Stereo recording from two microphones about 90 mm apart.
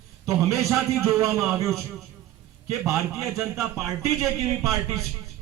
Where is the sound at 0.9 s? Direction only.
30° right (ahead or behind).